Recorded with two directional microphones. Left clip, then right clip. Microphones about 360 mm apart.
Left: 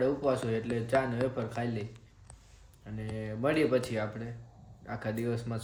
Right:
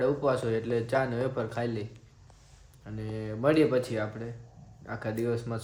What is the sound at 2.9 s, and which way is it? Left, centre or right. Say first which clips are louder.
Speech: right 2 dB; centre.